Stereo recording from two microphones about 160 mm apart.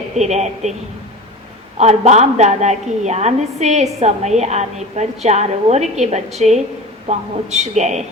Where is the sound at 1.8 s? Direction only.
45° right (ahead or behind).